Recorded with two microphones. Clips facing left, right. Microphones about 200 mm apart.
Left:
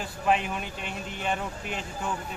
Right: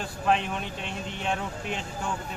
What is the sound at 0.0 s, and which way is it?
Speech, 5° left (ahead or behind).